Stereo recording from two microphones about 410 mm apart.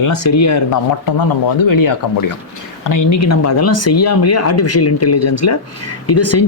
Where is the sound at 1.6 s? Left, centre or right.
Left.